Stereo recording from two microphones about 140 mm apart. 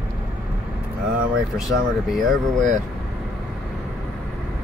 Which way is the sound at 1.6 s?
Centre (ahead or behind).